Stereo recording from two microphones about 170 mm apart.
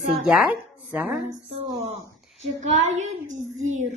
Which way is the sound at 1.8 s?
40° right (ahead or behind).